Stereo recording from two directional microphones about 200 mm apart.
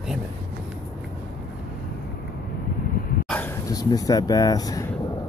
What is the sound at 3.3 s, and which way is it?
Speech, 10° left (ahead or behind).